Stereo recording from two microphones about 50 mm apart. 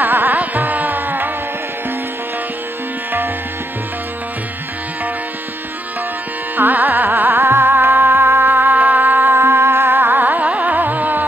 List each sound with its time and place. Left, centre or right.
0.0 s carnatic music: right
6.5 s carnatic music: right